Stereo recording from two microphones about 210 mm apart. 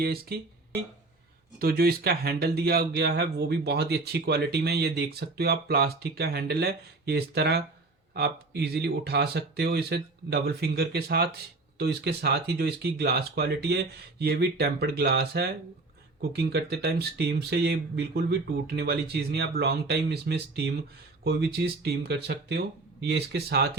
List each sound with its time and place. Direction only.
0.0 s speech: 45° right (ahead or behind)
1.5 s speech: 45° right (ahead or behind)